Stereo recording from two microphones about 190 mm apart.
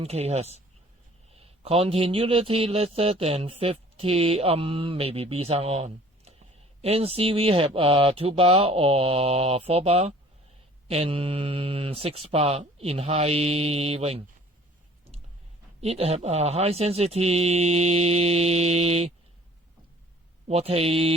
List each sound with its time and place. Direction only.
0.0 s speech: 35° right (ahead or behind)
15.8 s speech: 30° right (ahead or behind)
20.5 s speech: 30° right (ahead or behind)